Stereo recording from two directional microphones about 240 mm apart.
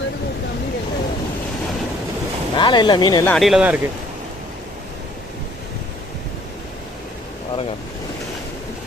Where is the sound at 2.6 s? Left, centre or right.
Centre.